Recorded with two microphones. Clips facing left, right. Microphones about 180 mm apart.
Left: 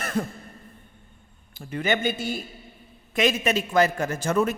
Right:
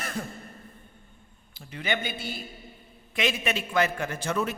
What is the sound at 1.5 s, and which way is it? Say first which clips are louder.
A man's voice: left 5 dB; 50° left (ahead or behind).